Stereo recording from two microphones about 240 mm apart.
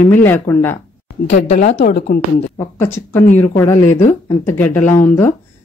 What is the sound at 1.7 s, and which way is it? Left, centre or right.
Speech, left.